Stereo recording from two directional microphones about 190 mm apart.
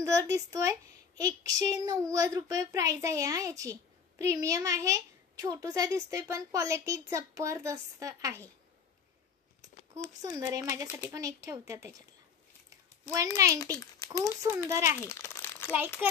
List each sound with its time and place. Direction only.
0.0 s a woman's voice: 15° right (ahead or behind)
10.4 s a woman's voice: 20° right (ahead or behind)
13.1 s a woman's voice: 15° right (ahead or behind)
13.7 s a child's voice: 20° left (ahead or behind)
14.4 s a woman's voice: 15° right (ahead or behind)
15.0 s crumpling: 15° left (ahead or behind)